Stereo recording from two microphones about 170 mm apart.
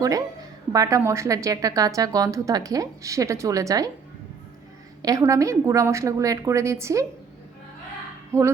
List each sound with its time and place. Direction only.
0.0 s a woman's voice: 20° right (ahead or behind)
5.2 s a woman's voice: 20° right (ahead or behind)
8.3 s speech: 15° right (ahead or behind)